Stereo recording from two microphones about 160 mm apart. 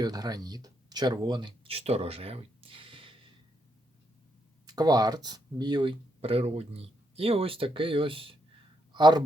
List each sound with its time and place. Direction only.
0.0 s speech: 25° right (ahead or behind)
4.6 s speech: 25° right (ahead or behind)